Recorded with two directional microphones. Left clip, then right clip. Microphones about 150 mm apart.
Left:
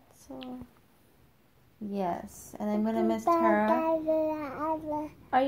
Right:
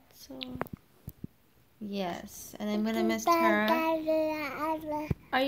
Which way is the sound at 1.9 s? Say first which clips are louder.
Left 3 dB; 15° right (ahead or behind).